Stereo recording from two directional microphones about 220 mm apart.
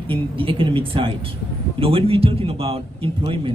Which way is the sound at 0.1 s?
25° right (ahead or behind).